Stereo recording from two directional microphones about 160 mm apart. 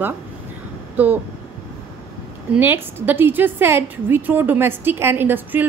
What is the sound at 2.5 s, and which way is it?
A woman's voice, 10° right (ahead or behind).